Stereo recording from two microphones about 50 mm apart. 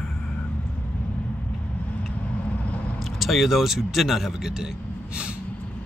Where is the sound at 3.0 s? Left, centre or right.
Centre.